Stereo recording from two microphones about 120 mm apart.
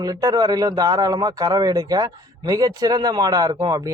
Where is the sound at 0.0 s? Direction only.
30° right (ahead or behind).